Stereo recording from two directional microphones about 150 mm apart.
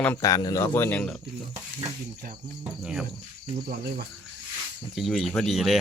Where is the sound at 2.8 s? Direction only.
5° right (ahead or behind).